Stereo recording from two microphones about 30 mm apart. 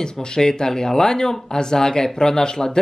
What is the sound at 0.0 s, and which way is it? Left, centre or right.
Speech, left.